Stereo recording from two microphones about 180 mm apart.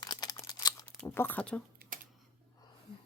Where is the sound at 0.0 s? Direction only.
20° left (ahead or behind).